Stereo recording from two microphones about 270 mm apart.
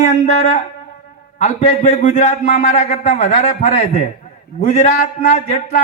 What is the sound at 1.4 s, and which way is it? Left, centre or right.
Speech, left.